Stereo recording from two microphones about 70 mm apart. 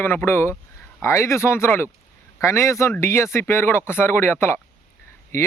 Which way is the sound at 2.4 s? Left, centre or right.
Left.